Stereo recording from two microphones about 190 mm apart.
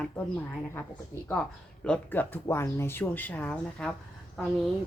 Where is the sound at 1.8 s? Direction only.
5° left (ahead or behind).